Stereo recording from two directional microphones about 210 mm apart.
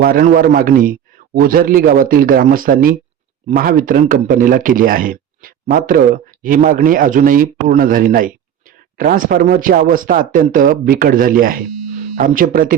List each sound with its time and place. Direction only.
0.0 s a man's voice: 45° right (ahead or behind)